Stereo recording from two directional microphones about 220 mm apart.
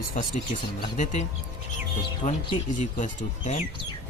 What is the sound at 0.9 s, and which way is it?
Speech, 35° left (ahead or behind).